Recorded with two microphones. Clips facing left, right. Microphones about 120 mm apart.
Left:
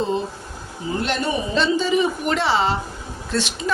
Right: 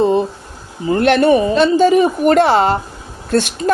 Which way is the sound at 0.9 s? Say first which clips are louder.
Right 12 dB; 70° right (ahead or behind).